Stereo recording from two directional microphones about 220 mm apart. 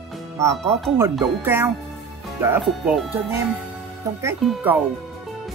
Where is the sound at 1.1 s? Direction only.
10° right (ahead or behind).